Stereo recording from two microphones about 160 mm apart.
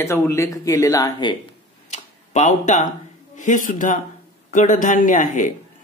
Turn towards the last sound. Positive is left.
turn(degrees=50)  # may be behind; listen again after turning